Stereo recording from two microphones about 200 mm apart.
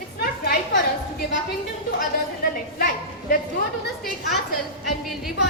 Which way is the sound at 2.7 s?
50° left (ahead or behind).